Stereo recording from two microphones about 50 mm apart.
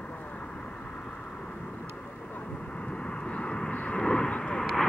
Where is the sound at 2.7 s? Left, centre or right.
Centre.